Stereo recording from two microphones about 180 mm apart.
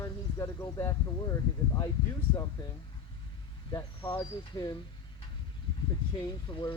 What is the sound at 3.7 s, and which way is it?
Speech, 15° left (ahead or behind).